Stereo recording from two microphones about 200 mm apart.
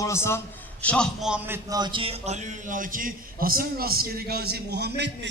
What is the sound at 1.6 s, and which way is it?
A man's voice, 20° right (ahead or behind).